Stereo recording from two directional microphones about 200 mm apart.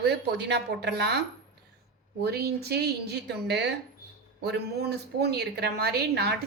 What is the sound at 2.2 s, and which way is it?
A woman's voice, 55° right (ahead or behind).